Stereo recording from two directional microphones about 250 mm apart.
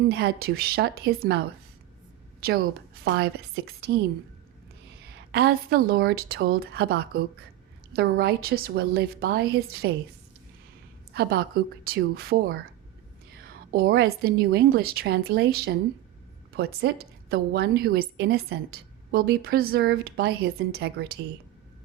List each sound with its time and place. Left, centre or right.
0.0 s a woman's voice: right
5.1 s a woman's voice: right
11.1 s a woman's voice: right